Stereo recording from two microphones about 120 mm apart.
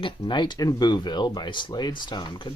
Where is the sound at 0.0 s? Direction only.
40° left (ahead or behind).